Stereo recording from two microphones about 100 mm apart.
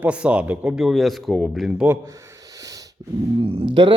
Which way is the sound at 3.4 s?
70° right (ahead or behind).